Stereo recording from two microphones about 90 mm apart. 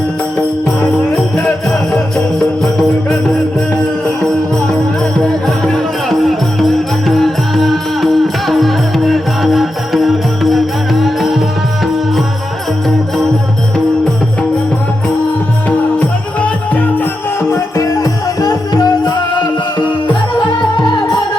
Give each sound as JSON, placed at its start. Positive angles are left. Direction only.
{"t": 0.8, "sound": "music", "side_deg": 5}
{"t": 5.2, "sound": "music", "side_deg": 10}
{"t": 16.0, "sound": "music", "side_deg": 15}
{"t": 17.5, "sound": "music", "side_deg": 35}